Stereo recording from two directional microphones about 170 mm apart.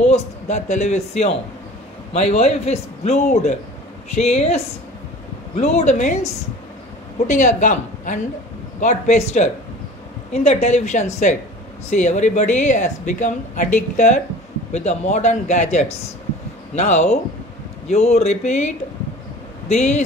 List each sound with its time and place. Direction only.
0.0 s a man's voice: 40° left (ahead or behind)
19.7 s a man's voice: 40° left (ahead or behind)